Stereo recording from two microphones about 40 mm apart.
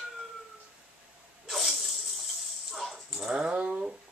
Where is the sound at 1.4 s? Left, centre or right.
Centre.